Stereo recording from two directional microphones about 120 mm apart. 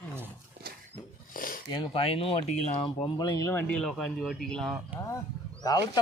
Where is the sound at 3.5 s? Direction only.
15° left (ahead or behind).